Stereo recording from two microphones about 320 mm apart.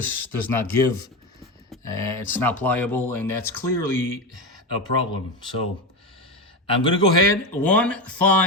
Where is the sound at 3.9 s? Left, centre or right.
Left.